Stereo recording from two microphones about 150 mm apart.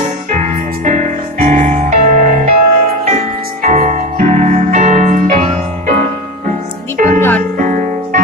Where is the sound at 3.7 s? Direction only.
55° right (ahead or behind).